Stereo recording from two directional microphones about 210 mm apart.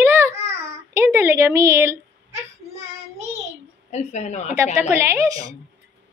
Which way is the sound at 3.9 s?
35° left (ahead or behind).